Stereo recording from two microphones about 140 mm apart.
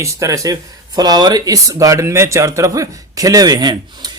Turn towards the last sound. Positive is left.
turn(degrees=-30)  # may be behind; listen again after turning